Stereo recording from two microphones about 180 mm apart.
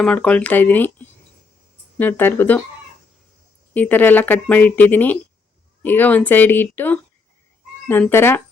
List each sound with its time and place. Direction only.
0.0 s speech: 5° left (ahead or behind)
3.8 s speech: 10° left (ahead or behind)